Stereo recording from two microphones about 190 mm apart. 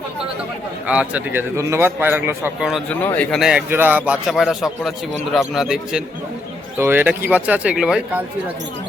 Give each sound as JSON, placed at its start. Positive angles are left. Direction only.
{"t": 0.9, "sound": "a man's voice", "side_deg": -5}
{"t": 2.9, "sound": "a man's voice", "side_deg": 10}